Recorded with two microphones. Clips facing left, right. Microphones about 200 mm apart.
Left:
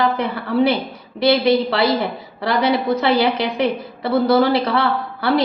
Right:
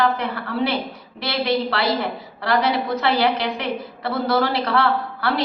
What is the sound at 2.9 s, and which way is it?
A woman's voice, 15° left (ahead or behind).